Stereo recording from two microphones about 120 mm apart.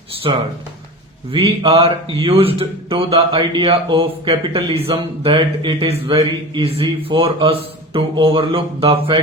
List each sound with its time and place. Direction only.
0.2 s speech: 45° right (ahead or behind)